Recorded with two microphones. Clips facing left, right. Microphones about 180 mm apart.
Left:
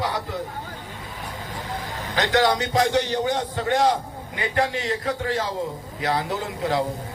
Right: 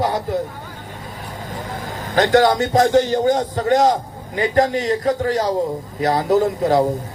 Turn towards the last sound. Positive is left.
turn(degrees=-40)  # may be behind; listen again after turning